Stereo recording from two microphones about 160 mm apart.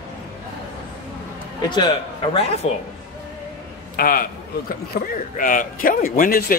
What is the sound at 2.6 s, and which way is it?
Speech, 40° left (ahead or behind).